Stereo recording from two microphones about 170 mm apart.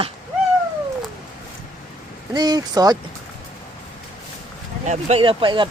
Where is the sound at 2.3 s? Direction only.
25° right (ahead or behind).